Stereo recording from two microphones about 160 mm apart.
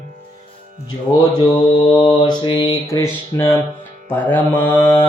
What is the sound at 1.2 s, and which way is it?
Mantra, 30° left (ahead or behind).